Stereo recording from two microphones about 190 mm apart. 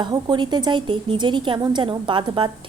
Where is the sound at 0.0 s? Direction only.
25° right (ahead or behind).